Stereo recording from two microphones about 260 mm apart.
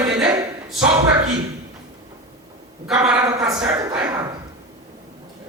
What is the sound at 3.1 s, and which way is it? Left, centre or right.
A woman's voice, centre.